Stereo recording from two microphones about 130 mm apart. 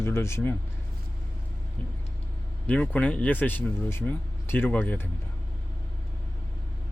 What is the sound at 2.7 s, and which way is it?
Speech, 10° left (ahead or behind).